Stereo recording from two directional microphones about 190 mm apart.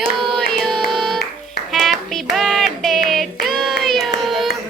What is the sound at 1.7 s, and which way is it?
Clapping, centre (ahead or behind).